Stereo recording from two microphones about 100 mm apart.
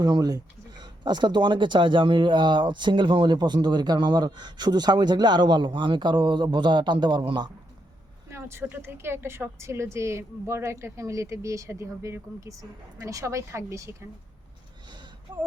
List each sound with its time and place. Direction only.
0.0 s speech: 40° right (ahead or behind)
8.3 s a sound: 25° right (ahead or behind)
8.7 s a woman's voice: 25° right (ahead or behind)